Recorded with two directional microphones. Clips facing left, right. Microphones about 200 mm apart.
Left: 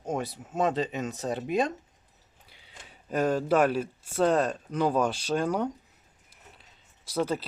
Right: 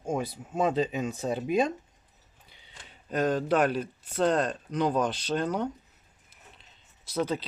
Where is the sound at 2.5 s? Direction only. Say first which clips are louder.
Left 1 dB; 10° left (ahead or behind).